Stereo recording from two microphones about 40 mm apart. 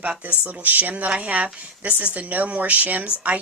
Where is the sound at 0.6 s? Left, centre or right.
Right.